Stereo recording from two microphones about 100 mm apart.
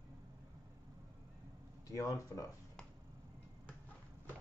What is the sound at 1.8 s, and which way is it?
Speech, 35° left (ahead or behind).